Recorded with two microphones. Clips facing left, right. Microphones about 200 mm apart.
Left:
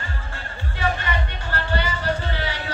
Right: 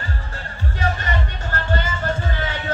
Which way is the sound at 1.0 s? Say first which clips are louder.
Right 1 dB; 45° right (ahead or behind).